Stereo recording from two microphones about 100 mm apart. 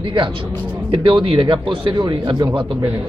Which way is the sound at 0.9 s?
60° right (ahead or behind).